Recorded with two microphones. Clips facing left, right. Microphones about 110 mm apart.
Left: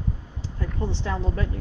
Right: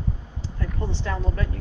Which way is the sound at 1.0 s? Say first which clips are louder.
Even; 20° left (ahead or behind).